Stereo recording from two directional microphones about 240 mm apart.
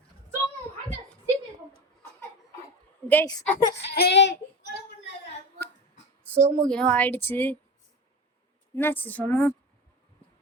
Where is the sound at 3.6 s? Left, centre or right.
Left.